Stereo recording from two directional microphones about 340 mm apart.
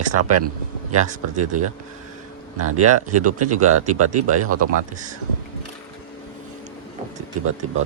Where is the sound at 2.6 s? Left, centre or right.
Right.